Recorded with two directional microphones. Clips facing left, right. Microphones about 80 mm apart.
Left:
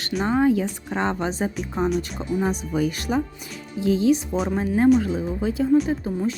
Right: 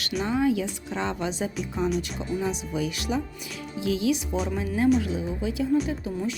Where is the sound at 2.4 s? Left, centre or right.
Left.